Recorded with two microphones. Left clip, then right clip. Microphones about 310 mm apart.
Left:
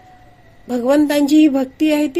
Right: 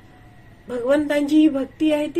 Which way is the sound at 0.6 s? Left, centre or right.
Left.